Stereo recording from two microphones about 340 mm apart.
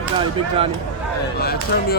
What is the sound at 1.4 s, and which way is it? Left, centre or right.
Speech, left.